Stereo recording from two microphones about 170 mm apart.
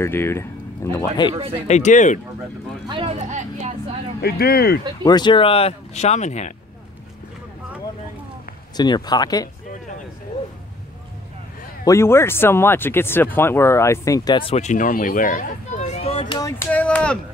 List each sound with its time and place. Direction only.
0.0 s speech: 15° left (ahead or behind)
0.9 s speech: 25° left (ahead or behind)
1.3 s speech: 30° right (ahead or behind)
1.7 s speech: 45° left (ahead or behind)
2.9 s a sound: 35° right (ahead or behind)
4.2 s speech: 65° left (ahead or behind)
5.0 s speech: 25° left (ahead or behind); by 6.5 s 45° left (ahead or behind)
8.7 s speech: 25° left (ahead or behind)
11.8 s speech: 15° left (ahead or behind)
16.4 s a sound: 10° left (ahead or behind)